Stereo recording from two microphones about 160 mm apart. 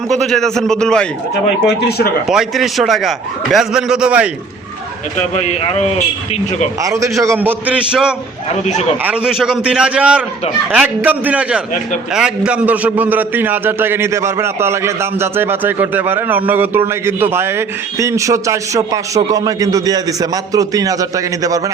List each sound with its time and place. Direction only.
0.1 s a man's voice: 5° left (ahead or behind)
2.3 s a man's voice: centre (ahead or behind)
5.1 s a man's voice: 45° left (ahead or behind)
6.8 s a man's voice: 20° right (ahead or behind)